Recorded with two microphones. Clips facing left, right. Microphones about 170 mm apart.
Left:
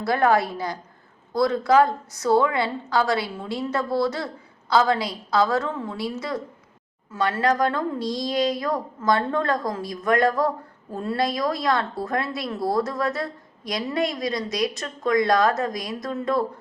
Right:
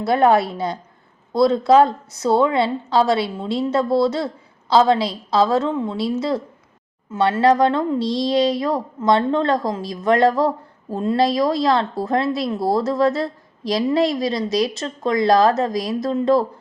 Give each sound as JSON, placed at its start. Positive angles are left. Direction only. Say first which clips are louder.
{"t": 0.0, "sound": "speech", "louder": "right 4 dB", "side_deg": -25}